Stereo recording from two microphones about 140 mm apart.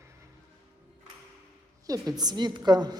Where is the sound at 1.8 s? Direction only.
25° right (ahead or behind).